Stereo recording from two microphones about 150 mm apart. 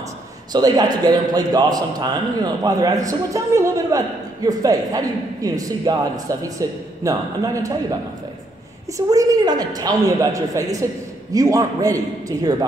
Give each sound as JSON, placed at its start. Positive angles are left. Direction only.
{"t": 0.5, "sound": "a man's voice", "side_deg": -25}
{"t": 8.9, "sound": "a man's voice", "side_deg": -25}